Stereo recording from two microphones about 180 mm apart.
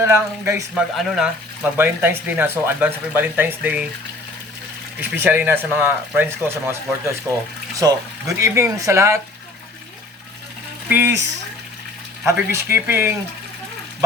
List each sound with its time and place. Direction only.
0.0 s speech: 15° right (ahead or behind)
0.7 s speech: centre (ahead or behind)
1.7 s speech: 10° right (ahead or behind)
4.9 s speech: 10° right (ahead or behind)
7.8 s speech: 20° right (ahead or behind)
10.8 s speech: 10° right (ahead or behind)